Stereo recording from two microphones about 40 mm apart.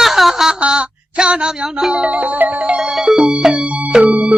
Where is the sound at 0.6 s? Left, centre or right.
Right.